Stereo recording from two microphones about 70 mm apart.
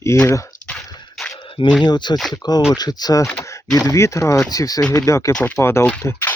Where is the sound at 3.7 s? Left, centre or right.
Left.